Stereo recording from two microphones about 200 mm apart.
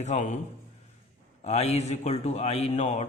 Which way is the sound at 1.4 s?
35° left (ahead or behind).